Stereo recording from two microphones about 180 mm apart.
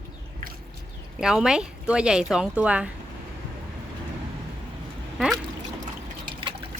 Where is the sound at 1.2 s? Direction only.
5° right (ahead or behind).